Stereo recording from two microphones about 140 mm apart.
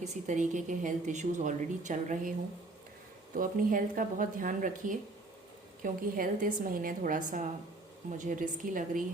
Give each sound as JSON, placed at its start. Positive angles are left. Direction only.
{"t": 0.0, "sound": "a woman's voice", "side_deg": -60}
{"t": 3.3, "sound": "speech", "side_deg": -80}